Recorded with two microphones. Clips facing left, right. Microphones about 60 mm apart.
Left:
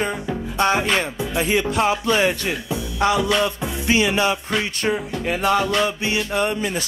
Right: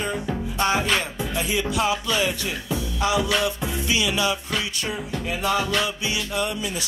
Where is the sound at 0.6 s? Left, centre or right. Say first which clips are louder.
Left 3 dB; left.